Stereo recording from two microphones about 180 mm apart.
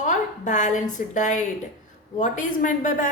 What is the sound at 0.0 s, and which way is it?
A woman's voice, 45° left (ahead or behind).